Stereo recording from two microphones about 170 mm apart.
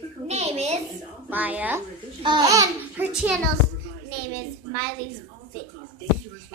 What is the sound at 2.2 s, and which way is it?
Speech, 25° right (ahead or behind).